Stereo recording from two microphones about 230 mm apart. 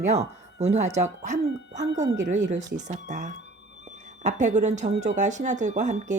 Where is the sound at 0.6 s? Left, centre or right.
Right.